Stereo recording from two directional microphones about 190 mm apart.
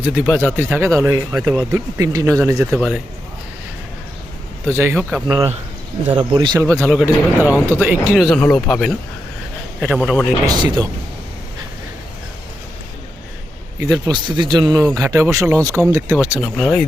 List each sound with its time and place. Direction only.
0.0 s speech: 5° right (ahead or behind)
2.6 s speech: 5° right (ahead or behind)
4.7 s speech: 10° right (ahead or behind)
6.1 s speech: 25° right (ahead or behind); by 8.4 s 5° right (ahead or behind)
8.4 s speech: 10° left (ahead or behind)
10.4 s a man's voice: 20° right (ahead or behind)
13.7 s a man's voice: 20° right (ahead or behind)
16.1 s speech: 5° right (ahead or behind)